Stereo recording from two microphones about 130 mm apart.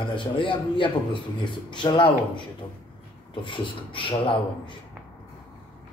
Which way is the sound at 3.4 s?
40° left (ahead or behind).